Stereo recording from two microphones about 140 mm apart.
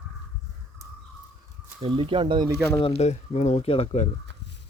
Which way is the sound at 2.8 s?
45° left (ahead or behind).